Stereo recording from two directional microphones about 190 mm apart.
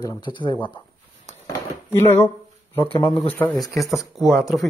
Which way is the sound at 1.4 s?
10° left (ahead or behind).